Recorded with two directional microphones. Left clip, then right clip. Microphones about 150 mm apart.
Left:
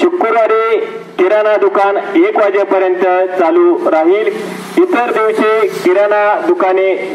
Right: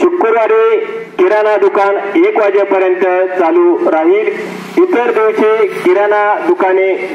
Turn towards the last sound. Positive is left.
turn(degrees=20)  # may be behind; listen again after turning